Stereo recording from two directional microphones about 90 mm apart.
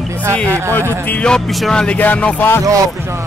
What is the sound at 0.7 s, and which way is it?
Speech, 20° left (ahead or behind).